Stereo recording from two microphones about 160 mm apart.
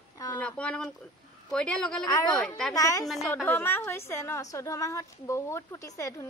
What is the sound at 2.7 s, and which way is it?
A woman's voice, 20° left (ahead or behind).